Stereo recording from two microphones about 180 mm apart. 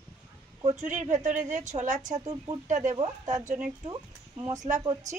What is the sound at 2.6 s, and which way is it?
Speech, 45° right (ahead or behind).